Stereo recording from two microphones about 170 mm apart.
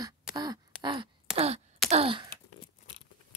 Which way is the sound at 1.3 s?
35° right (ahead or behind).